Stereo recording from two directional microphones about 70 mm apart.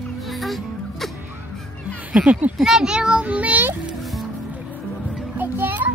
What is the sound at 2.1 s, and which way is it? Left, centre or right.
A child's voice, centre.